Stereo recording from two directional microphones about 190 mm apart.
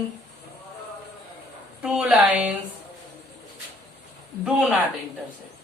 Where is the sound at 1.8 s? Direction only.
5° right (ahead or behind).